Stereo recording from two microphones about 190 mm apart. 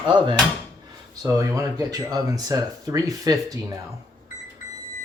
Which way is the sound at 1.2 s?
15° right (ahead or behind).